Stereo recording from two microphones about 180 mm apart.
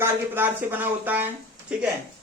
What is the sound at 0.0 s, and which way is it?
Speech, 10° right (ahead or behind).